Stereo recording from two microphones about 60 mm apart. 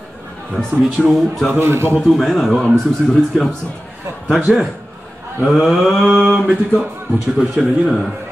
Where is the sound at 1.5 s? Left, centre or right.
Right.